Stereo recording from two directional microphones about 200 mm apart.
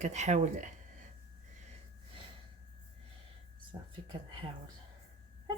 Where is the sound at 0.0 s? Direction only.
35° right (ahead or behind).